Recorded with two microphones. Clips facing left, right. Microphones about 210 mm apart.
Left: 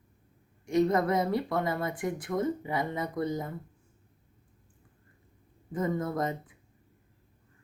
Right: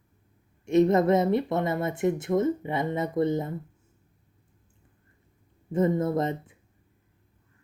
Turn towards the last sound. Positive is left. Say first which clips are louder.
# right 5 dB
turn(degrees=-25)  # may be behind; listen again after turning